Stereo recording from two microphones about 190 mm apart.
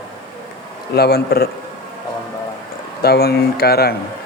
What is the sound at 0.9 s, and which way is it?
Speech, 55° left (ahead or behind).